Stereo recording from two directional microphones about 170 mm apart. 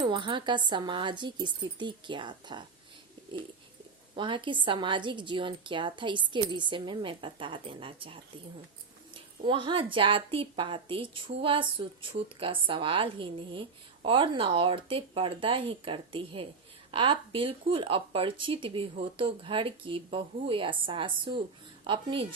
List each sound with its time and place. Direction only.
0.0 s a woman's voice: 30° right (ahead or behind)
4.1 s a woman's voice: 30° right (ahead or behind)